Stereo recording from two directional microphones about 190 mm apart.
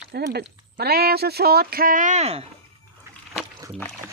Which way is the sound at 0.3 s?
55° right (ahead or behind).